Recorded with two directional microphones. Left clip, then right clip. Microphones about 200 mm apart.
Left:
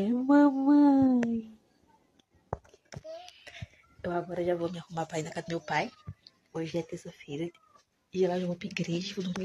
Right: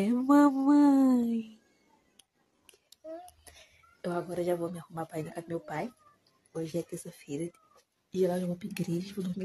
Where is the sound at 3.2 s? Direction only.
15° right (ahead or behind).